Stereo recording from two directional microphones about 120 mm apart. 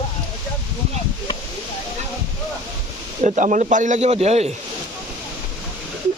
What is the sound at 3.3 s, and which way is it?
A man's voice, 85° right.